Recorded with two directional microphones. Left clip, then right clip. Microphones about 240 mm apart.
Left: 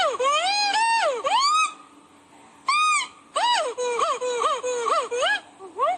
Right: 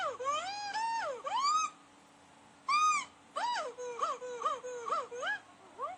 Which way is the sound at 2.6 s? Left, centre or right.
Left.